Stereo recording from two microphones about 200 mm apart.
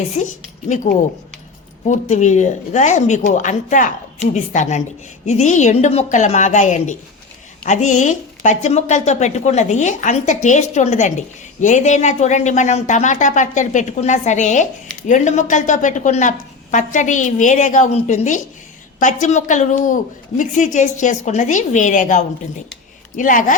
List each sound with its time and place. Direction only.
0.2 s a woman's voice: 35° left (ahead or behind)
1.9 s a woman's voice: 35° left (ahead or behind)